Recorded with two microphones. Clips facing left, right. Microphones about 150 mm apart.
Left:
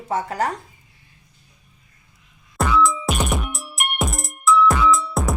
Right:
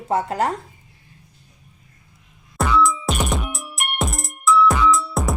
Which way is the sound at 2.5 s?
Centre (ahead or behind).